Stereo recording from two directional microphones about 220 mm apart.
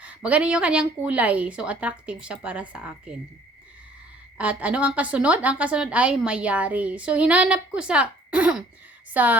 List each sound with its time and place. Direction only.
0.0 s a woman's voice: 5° right (ahead or behind)
4.4 s a woman's voice: 5° right (ahead or behind)